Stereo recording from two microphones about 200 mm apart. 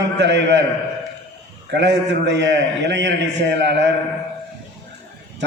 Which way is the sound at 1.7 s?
60° right (ahead or behind).